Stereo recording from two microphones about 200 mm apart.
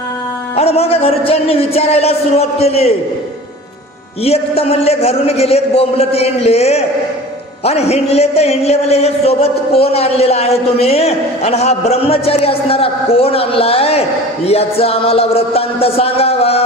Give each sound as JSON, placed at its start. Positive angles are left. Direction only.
{"t": 0.5, "sound": "speech", "side_deg": 30}
{"t": 4.2, "sound": "speech", "side_deg": 30}
{"t": 14.4, "sound": "music", "side_deg": 30}